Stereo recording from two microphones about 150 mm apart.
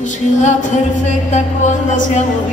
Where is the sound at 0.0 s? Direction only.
55° left (ahead or behind).